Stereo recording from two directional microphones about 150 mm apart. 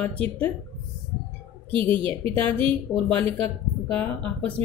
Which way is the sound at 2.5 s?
10° left (ahead or behind).